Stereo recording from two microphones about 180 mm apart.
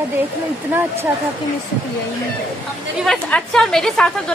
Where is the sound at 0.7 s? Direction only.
15° right (ahead or behind).